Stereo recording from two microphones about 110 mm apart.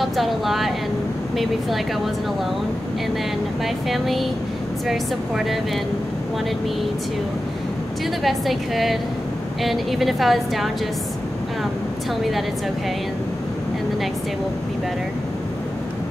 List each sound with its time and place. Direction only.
0.0 s a woman's voice: centre (ahead or behind)
3.9 s a woman's voice: centre (ahead or behind)
8.2 s a woman's voice: centre (ahead or behind)
12.2 s a woman's voice: centre (ahead or behind)